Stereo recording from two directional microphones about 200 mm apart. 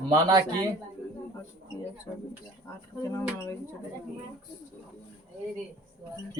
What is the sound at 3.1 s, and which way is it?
Speech, 15° left (ahead or behind).